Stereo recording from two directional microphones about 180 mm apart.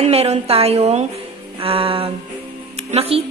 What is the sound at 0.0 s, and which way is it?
A woman's voice, 35° right (ahead or behind).